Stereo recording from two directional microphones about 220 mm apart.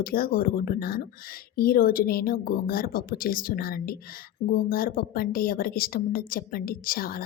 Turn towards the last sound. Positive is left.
turn(degrees=40)  # may be behind; listen again after turning